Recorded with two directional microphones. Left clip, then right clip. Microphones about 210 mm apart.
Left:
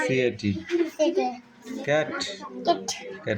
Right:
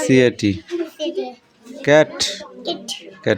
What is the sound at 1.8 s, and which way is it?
Speech, 45° right (ahead or behind).